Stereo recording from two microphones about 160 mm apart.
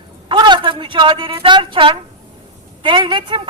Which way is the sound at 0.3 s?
30° right (ahead or behind).